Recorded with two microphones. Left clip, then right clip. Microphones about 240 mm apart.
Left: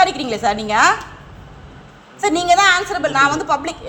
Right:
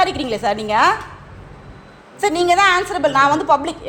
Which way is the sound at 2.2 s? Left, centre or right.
Centre.